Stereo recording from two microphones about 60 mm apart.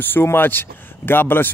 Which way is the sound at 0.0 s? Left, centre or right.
Left.